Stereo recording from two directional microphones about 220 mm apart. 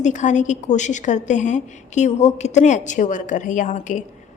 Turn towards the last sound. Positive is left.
turn(degrees=35)  # may be behind; listen again after turning